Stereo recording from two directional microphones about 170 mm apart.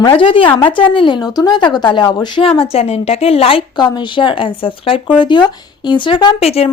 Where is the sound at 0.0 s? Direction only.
30° left (ahead or behind).